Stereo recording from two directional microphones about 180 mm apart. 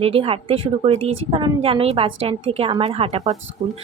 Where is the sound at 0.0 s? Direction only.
30° right (ahead or behind).